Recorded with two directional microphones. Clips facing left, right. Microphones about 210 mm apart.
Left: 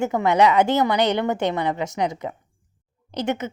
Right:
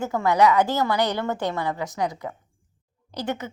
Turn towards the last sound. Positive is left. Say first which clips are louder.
# left 4 dB
turn(degrees=20)  # may be behind; listen again after turning